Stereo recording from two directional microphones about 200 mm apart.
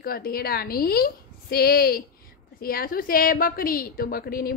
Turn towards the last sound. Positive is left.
turn(degrees=50)  # may be behind; listen again after turning